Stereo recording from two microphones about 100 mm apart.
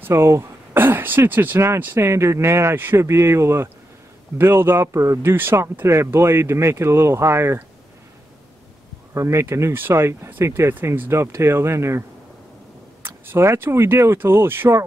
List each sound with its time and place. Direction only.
0.0 s speech: 25° right (ahead or behind)
9.1 s speech: 30° right (ahead or behind)
13.0 s speech: 25° right (ahead or behind)